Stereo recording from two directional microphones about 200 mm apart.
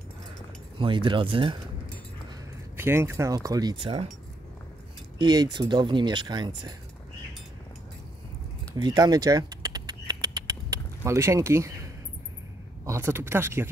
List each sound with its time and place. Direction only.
0.7 s speech: 25° right (ahead or behind)
2.8 s speech: 10° right (ahead or behind)
5.2 s speech: 20° right (ahead or behind)
8.7 s a sound: 20° right (ahead or behind)
12.8 s speech: 15° right (ahead or behind)